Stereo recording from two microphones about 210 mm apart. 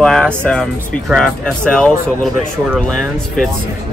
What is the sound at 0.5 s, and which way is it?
Speech, 5° left (ahead or behind).